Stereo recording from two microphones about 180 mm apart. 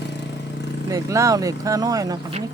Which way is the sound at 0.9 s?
20° right (ahead or behind).